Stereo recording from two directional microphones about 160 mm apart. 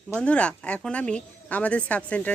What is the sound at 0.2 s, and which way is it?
A woman's voice, 5° left (ahead or behind).